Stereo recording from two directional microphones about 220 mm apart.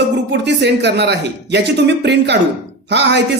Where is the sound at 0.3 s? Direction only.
50° right (ahead or behind).